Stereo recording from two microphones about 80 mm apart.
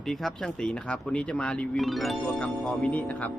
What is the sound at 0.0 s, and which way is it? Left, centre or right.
Speech, centre.